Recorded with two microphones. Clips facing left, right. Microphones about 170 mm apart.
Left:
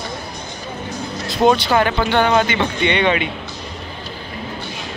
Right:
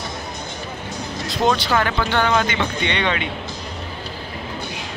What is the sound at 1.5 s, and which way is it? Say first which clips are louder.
Speech: left 3 dB; 25° left (ahead or behind).